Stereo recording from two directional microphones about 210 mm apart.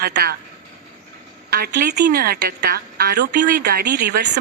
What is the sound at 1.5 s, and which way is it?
A woman's voice, 50° right (ahead or behind).